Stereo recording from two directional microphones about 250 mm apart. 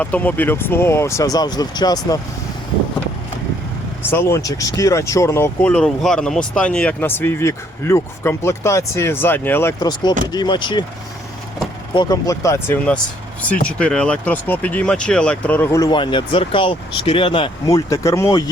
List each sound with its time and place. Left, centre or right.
0.0 s speech: centre
4.0 s speech: centre
11.9 s speech: centre